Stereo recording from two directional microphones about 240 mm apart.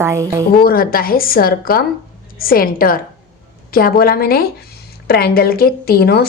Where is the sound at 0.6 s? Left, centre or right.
Left.